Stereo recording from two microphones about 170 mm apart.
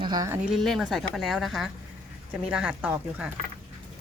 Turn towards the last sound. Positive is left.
turn(degrees=-10)  # may be behind; listen again after turning